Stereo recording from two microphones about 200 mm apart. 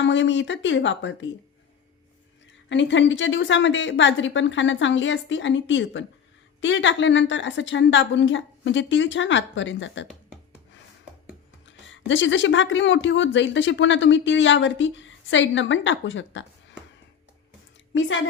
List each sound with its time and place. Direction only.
0.0 s speech: 65° left (ahead or behind)
2.6 s speech: 65° left (ahead or behind)
11.6 s speech: 70° left (ahead or behind)